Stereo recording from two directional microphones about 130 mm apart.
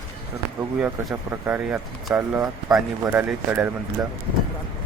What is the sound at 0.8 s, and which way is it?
Speech, 10° right (ahead or behind).